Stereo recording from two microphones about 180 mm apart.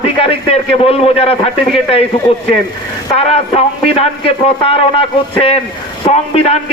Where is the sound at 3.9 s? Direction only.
35° left (ahead or behind).